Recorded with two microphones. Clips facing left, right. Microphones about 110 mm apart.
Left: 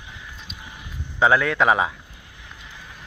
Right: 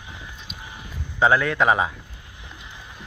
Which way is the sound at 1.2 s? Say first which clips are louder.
Left 1 dB; centre (ahead or behind).